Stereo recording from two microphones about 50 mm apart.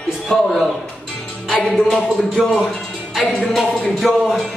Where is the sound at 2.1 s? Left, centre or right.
Centre.